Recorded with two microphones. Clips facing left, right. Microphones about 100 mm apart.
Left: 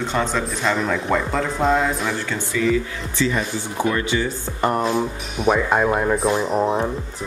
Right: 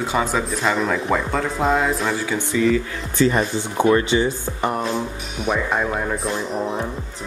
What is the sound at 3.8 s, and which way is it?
Speech, 25° right (ahead or behind).